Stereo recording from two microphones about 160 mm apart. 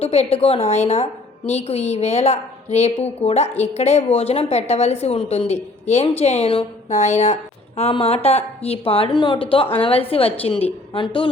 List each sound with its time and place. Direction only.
0.0 s a woman's voice: 40° left (ahead or behind)